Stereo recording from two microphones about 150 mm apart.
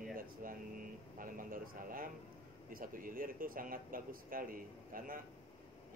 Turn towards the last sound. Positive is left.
turn(degrees=-70)  # may be behind; listen again after turning